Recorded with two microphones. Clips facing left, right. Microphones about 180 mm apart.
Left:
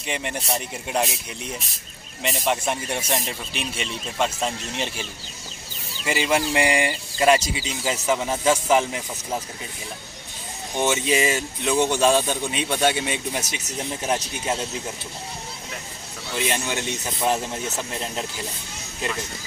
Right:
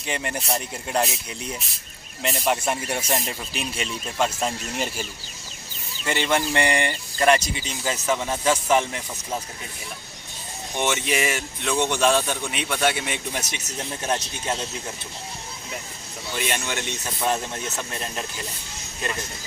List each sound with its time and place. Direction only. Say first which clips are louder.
0.0 s speech: even; centre (ahead or behind)
6.1 s speech: left 1 dB; 5° left (ahead or behind)
10.8 s speech: left 3 dB; 15° left (ahead or behind)
16.3 s speech: left 2 dB; 20° left (ahead or behind)